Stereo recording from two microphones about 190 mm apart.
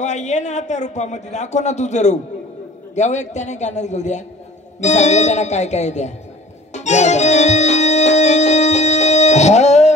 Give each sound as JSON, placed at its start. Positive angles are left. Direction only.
{"t": 0.0, "sound": "a man's voice", "side_deg": 40}
{"t": 6.7, "sound": "music", "side_deg": 35}